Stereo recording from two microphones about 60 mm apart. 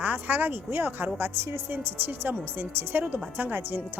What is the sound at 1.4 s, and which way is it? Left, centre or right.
Speech, right.